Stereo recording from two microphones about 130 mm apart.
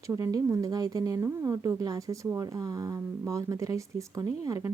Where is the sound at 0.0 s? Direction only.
25° right (ahead or behind).